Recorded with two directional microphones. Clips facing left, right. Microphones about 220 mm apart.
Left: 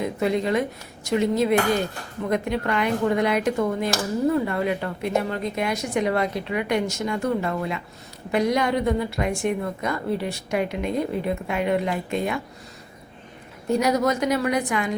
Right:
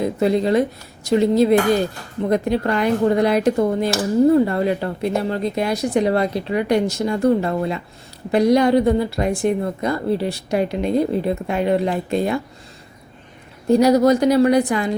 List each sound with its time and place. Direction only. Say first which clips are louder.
0.0 s speech: right 5 dB; 35° right (ahead or behind)
13.7 s speech: right 8 dB; 35° right (ahead or behind)